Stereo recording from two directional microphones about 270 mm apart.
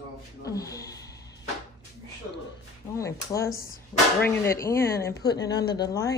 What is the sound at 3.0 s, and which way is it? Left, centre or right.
Speech, centre.